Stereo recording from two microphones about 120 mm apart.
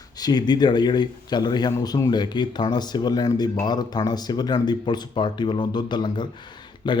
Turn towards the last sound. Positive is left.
turn(degrees=40)  # may be behind; listen again after turning